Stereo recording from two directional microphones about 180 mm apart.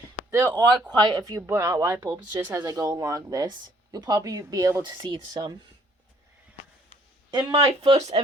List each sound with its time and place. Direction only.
0.3 s speech: 15° right (ahead or behind)
7.3 s speech: 25° right (ahead or behind)